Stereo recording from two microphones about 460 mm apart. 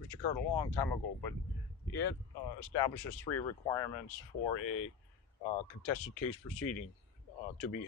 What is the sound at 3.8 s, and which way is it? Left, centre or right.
Speech, left.